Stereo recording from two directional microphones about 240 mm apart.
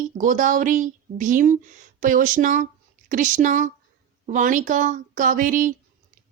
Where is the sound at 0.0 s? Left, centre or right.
Right.